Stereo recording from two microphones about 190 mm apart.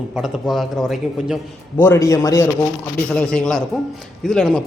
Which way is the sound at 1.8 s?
15° left (ahead or behind).